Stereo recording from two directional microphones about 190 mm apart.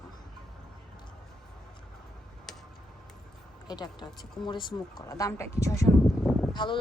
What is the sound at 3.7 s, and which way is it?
A woman's voice, 20° left (ahead or behind).